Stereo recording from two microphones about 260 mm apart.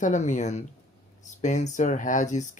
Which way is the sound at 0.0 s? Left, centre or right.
Left.